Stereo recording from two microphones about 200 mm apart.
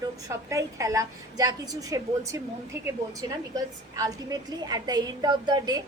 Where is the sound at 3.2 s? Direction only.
15° right (ahead or behind).